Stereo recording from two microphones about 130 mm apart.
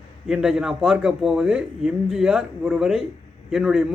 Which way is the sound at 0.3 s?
5° right (ahead or behind).